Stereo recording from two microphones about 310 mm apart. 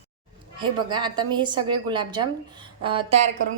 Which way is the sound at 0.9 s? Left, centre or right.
Centre.